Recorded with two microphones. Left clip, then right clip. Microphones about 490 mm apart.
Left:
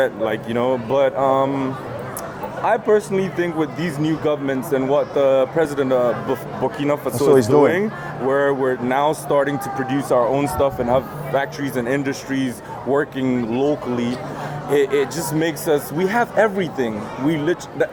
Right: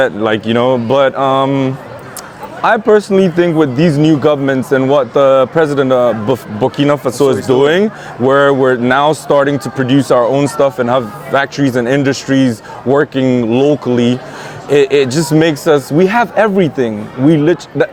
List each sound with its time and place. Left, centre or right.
0.0 s speech: right